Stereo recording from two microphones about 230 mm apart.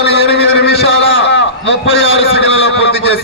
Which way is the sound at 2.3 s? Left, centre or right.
Left.